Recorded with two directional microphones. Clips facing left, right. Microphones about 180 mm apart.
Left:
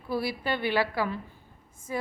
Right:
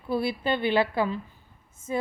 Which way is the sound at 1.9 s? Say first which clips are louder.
Right 3 dB; 25° right (ahead or behind).